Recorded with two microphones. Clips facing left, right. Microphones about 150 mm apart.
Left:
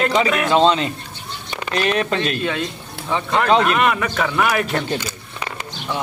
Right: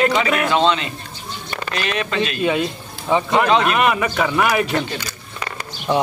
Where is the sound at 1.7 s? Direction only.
40° left (ahead or behind).